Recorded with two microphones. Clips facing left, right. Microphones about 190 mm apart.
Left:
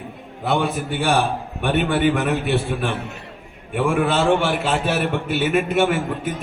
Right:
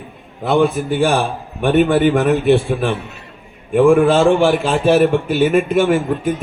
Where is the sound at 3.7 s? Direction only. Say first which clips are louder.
Right 9 dB; 45° right (ahead or behind).